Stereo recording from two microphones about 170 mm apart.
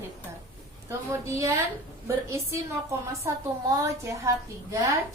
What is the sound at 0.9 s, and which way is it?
A woman's voice, 15° right (ahead or behind).